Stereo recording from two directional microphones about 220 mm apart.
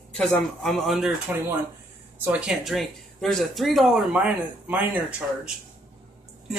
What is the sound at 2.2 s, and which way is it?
Speech, 5° right (ahead or behind).